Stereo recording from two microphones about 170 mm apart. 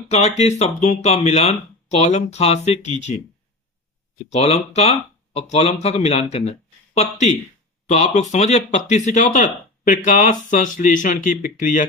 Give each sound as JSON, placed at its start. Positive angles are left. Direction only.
{"t": 0.4, "sound": "speech", "side_deg": 40}
{"t": 4.3, "sound": "speech", "side_deg": 40}